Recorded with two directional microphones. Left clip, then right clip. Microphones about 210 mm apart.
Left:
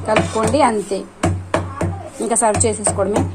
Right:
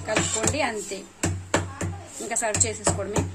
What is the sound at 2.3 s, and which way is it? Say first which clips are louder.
Speech: left 10 dB; 15° left (ahead or behind).